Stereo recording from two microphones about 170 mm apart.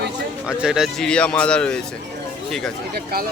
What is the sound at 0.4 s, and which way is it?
Speech, 5° right (ahead or behind).